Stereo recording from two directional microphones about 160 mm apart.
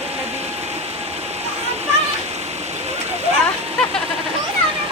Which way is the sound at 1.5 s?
40° right (ahead or behind).